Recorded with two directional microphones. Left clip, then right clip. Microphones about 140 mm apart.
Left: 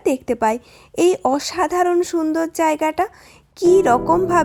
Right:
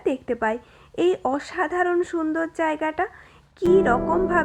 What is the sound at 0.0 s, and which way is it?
A woman's voice, 55° left (ahead or behind).